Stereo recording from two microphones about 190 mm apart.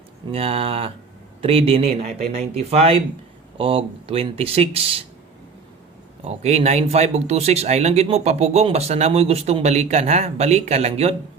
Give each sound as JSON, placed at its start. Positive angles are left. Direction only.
{"t": 0.3, "sound": "speech", "side_deg": -30}
{"t": 6.2, "sound": "speech", "side_deg": -35}